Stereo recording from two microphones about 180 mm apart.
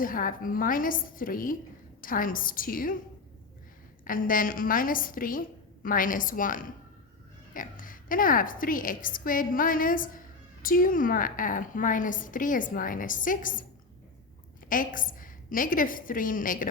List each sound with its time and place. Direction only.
0.0 s a woman's voice: 50° left (ahead or behind)
4.0 s a woman's voice: 50° left (ahead or behind)
14.7 s a woman's voice: 50° left (ahead or behind)